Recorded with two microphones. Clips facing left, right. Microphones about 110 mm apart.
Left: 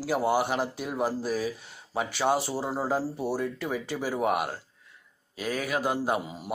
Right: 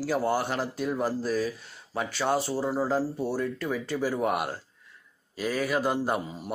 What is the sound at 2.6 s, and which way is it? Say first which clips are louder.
Speech: right 3 dB; 20° left (ahead or behind).